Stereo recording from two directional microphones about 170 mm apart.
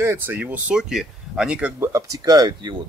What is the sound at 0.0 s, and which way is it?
Speech, 10° right (ahead or behind).